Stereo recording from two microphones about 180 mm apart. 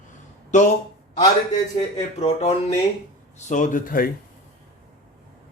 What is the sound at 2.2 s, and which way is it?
Speech, 35° left (ahead or behind).